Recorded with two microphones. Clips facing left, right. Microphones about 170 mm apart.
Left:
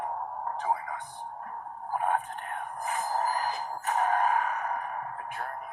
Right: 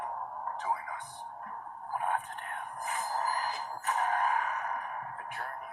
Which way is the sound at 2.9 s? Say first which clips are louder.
Left 4 dB; 45° left (ahead or behind).